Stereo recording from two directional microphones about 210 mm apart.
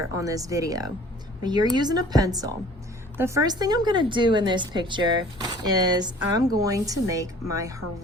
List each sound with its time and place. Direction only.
0.1 s speech: 15° right (ahead or behind)